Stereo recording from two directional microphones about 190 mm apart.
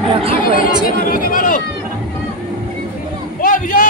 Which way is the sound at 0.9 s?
45° left (ahead or behind).